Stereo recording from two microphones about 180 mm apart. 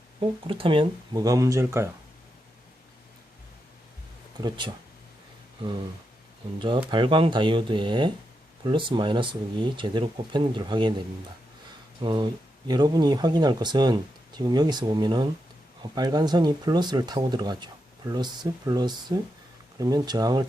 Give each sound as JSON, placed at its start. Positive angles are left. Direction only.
{"t": 0.2, "sound": "speech", "side_deg": -30}
{"t": 4.4, "sound": "speech", "side_deg": -25}
{"t": 6.6, "sound": "speech", "side_deg": -25}
{"t": 12.0, "sound": "speech", "side_deg": -25}